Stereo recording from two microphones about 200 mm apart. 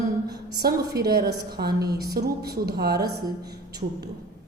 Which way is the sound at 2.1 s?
55° right (ahead or behind).